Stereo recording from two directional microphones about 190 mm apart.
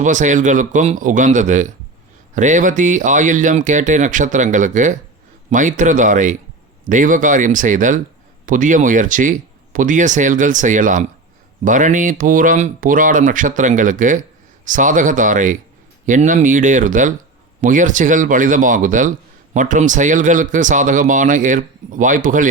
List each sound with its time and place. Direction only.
0.0 s speech: 40° right (ahead or behind)